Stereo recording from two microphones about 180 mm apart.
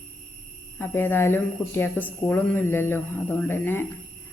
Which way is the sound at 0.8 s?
10° left (ahead or behind).